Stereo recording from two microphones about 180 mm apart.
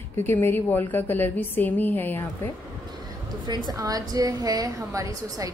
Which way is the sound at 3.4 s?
25° right (ahead or behind).